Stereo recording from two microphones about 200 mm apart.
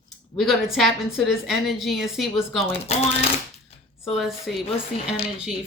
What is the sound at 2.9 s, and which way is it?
Speech, 30° left (ahead or behind).